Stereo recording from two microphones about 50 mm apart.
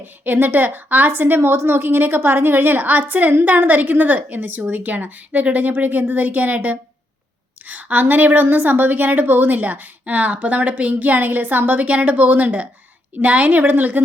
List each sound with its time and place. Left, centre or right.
0.0 s a woman's voice: right